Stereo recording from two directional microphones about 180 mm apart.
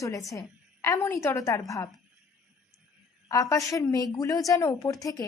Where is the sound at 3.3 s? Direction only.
20° left (ahead or behind).